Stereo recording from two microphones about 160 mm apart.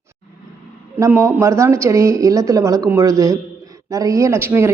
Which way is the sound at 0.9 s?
20° right (ahead or behind).